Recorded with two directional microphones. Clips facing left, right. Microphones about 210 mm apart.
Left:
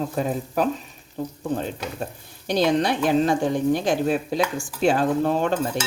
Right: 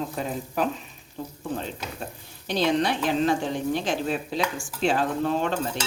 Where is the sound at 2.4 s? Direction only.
45° left (ahead or behind).